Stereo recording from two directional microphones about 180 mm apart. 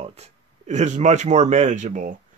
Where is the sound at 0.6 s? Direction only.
40° right (ahead or behind).